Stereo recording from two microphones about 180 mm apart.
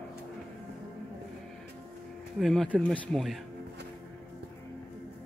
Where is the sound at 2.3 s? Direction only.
Centre (ahead or behind).